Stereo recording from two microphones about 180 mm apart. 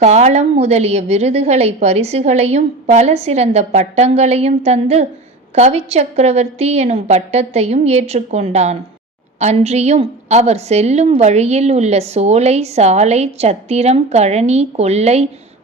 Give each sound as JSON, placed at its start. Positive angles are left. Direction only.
{"t": 0.0, "sound": "a woman's voice", "side_deg": -40}